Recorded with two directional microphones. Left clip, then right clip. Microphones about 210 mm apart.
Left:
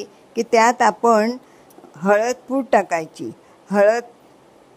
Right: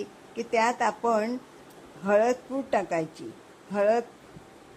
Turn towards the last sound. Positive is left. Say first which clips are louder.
# left 8 dB
turn(degrees=55)  # may be behind; listen again after turning